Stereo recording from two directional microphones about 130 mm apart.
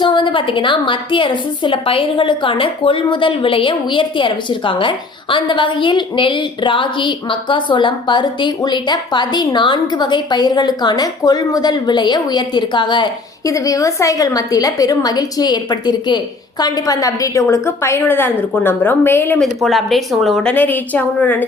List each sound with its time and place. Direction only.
0.0 s a woman's voice: 40° left (ahead or behind); by 19.4 s 15° left (ahead or behind)
19.6 s a woman's voice: centre (ahead or behind)